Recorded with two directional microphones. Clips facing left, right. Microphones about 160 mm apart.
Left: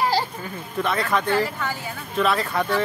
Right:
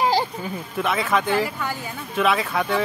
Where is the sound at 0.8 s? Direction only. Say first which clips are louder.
Right 1 dB; centre (ahead or behind).